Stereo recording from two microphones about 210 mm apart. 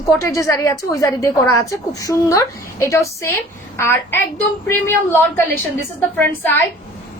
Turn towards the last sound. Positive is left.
turn(degrees=10)  # may be behind; listen again after turning